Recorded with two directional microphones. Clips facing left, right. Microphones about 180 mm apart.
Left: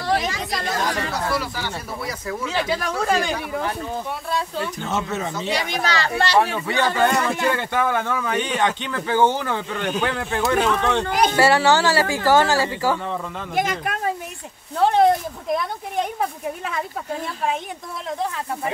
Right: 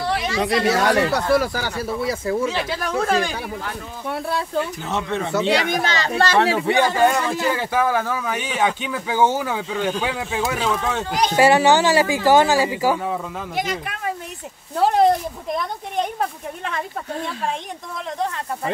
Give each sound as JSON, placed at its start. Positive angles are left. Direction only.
{"t": 0.0, "sound": "chatter", "side_deg": 40}
{"t": 0.4, "sound": "speech", "side_deg": -75}
{"t": 1.4, "sound": "speech", "side_deg": -45}
{"t": 2.0, "sound": "speech", "side_deg": -30}
{"t": 2.5, "sound": "speech", "side_deg": 0}
{"t": 4.1, "sound": "speech", "side_deg": -60}
{"t": 4.8, "sound": "speech", "side_deg": 0}
{"t": 5.3, "sound": "speech", "side_deg": -75}
{"t": 5.9, "sound": "speech", "side_deg": -20}
{"t": 7.0, "sound": "speech", "side_deg": -5}
{"t": 11.1, "sound": "speech", "side_deg": 55}
{"t": 11.3, "sound": "speech", "side_deg": -15}
{"t": 13.6, "sound": "speech", "side_deg": 50}
{"t": 14.8, "sound": "speech", "side_deg": 0}